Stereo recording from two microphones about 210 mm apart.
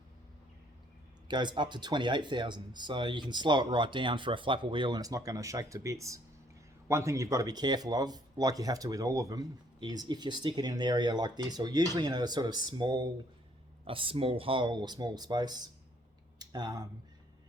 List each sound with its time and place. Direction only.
1.3 s speech: 20° right (ahead or behind)